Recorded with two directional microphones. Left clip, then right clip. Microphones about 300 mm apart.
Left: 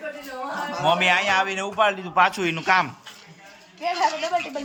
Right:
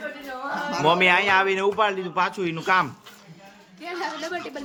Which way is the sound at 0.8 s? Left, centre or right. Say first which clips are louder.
Right 1 dB; centre.